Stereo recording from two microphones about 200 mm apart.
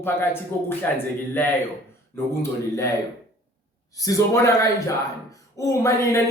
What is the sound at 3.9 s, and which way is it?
Speech, 15° left (ahead or behind).